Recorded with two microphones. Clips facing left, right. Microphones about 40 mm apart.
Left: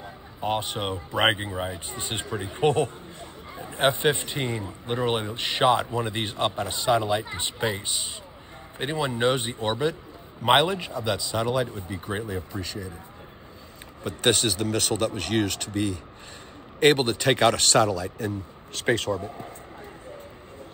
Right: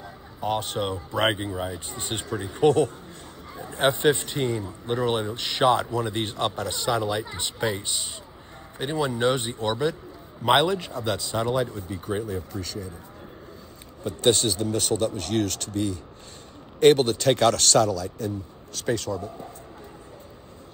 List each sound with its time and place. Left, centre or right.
0.0 s speech: left
1.9 s speech: left
2.2 s a man's voice: left
14.6 s speech: left
15.0 s a man's voice: centre
18.8 s speech: left